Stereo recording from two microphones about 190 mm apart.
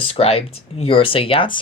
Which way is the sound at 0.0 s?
30° left (ahead or behind).